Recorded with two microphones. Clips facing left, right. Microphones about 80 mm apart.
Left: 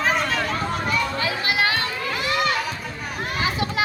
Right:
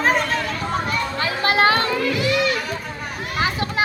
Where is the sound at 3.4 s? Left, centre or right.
Right.